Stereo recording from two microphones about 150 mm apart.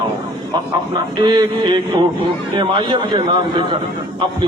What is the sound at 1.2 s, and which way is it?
A man's voice, 30° right (ahead or behind).